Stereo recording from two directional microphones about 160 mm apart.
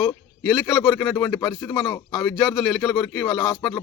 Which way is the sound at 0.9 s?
10° left (ahead or behind).